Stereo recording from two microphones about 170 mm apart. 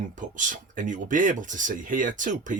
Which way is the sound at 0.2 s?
50° right (ahead or behind).